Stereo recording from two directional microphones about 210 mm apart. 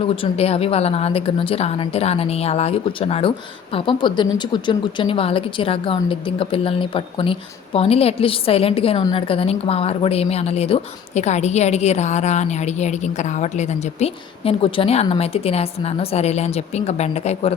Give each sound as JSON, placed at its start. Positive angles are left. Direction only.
{"t": 0.2, "sound": "speech", "side_deg": 30}